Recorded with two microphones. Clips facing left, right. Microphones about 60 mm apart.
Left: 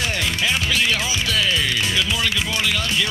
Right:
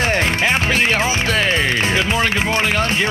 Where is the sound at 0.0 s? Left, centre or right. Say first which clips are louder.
Right 6 dB; right.